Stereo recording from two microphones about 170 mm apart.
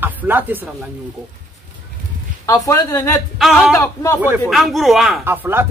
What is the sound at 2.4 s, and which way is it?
Speech, 20° left (ahead or behind).